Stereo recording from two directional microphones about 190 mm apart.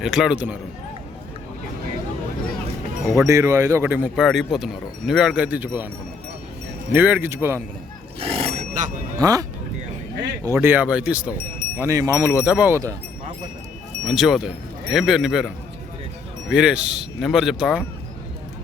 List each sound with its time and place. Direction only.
0.0 s speech: centre (ahead or behind)
3.2 s speech: 15° right (ahead or behind)
6.9 s speech: 10° right (ahead or behind)
8.2 s a sound: 30° right (ahead or behind)
9.1 s speech: 20° right (ahead or behind)
11.8 s speech: 15° right (ahead or behind)
14.0 s speech: centre (ahead or behind)